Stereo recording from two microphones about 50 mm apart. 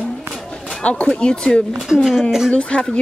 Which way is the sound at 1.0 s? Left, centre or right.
Centre.